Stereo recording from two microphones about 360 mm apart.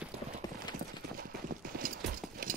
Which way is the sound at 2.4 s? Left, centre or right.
Right.